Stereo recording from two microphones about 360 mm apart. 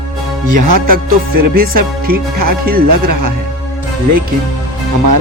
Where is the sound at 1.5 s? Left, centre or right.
Right.